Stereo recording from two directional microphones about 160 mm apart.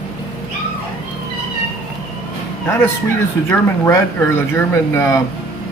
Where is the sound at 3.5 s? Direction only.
15° left (ahead or behind).